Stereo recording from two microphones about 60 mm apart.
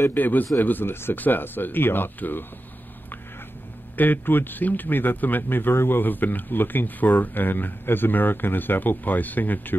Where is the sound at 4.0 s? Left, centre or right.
Left.